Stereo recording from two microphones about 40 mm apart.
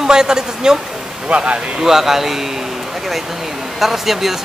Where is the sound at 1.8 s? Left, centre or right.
Centre.